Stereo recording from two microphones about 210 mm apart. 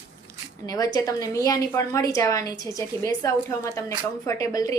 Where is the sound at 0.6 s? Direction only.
15° left (ahead or behind).